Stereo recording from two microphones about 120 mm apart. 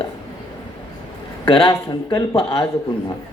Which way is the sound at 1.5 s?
45° left (ahead or behind).